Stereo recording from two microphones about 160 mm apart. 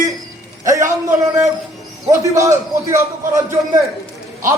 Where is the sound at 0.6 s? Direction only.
20° right (ahead or behind).